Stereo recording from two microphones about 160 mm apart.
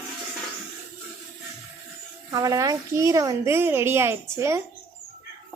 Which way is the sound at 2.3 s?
20° right (ahead or behind).